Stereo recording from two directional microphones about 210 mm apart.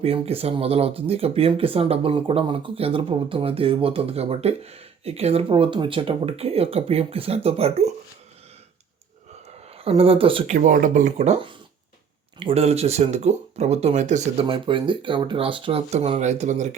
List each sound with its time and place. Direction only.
0.0 s speech: 30° right (ahead or behind)
9.6 s a sound: 30° right (ahead or behind)
9.9 s speech: 25° right (ahead or behind)